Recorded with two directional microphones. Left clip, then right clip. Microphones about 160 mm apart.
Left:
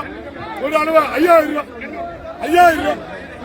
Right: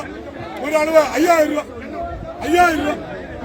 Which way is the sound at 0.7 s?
90° right.